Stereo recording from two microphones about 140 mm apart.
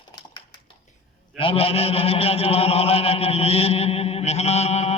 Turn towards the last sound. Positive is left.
turn(degrees=50)  # may be behind; listen again after turning